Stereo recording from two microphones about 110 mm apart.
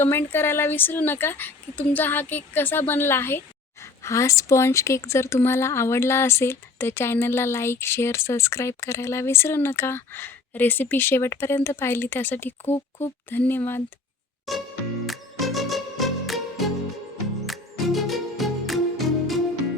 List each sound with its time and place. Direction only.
0.0 s a woman's voice: 20° left (ahead or behind)
15.0 s music: centre (ahead or behind)